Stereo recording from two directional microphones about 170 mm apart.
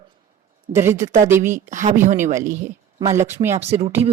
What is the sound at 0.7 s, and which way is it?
Speech, 15° right (ahead or behind).